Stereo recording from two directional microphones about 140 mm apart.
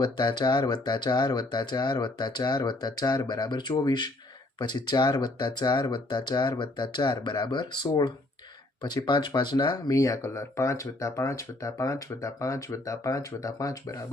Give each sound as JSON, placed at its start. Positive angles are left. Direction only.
{"t": 0.0, "sound": "speech", "side_deg": 30}